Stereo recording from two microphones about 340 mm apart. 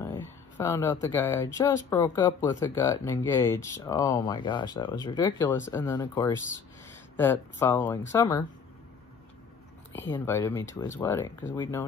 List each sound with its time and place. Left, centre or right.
0.0 s a sound: centre
1.0 s speech: centre
10.1 s speech: centre